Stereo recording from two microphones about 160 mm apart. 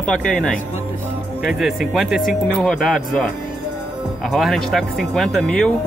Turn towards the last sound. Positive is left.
turn(degrees=5)  # may be behind; listen again after turning